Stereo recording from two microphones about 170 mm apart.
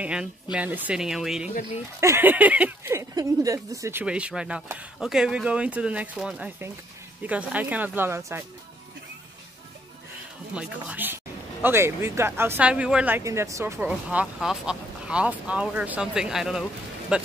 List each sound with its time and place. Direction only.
0.0 s speech: 5° right (ahead or behind)
2.0 s speech: 15° right (ahead or behind)
4.0 s speech: 5° right (ahead or behind)
10.5 s speech: 5° right (ahead or behind)